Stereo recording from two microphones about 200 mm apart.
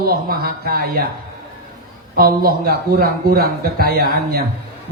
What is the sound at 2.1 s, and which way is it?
A man's voice, 45° right (ahead or behind).